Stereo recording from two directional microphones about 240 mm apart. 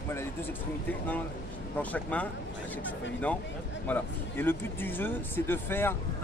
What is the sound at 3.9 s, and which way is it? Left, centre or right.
Speech, centre.